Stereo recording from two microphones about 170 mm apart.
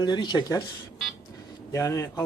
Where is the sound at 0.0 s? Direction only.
25° left (ahead or behind).